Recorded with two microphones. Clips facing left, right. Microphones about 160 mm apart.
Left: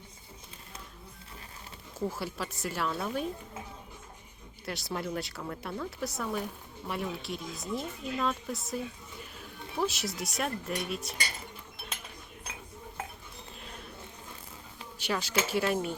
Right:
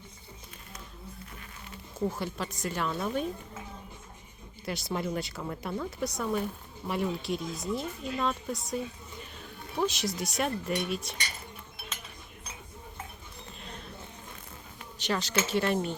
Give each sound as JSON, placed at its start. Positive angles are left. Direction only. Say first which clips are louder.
{"t": 2.0, "sound": "speech", "louder": "right 2 dB", "side_deg": 5}
{"t": 4.6, "sound": "speech", "louder": "right 3 dB", "side_deg": 0}
{"t": 13.6, "sound": "a sound", "louder": "right 3 dB", "side_deg": 5}
{"t": 14.9, "sound": "speech", "louder": "right 1 dB", "side_deg": 10}